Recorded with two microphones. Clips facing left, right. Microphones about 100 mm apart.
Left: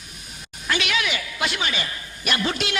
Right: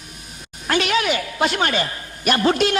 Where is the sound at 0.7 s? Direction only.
40° right (ahead or behind).